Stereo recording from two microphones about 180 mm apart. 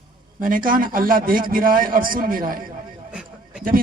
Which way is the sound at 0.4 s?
50° right (ahead or behind).